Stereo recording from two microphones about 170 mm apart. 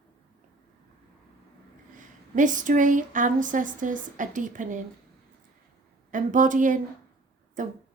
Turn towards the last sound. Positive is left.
turn(degrees=-50)  # may be behind; listen again after turning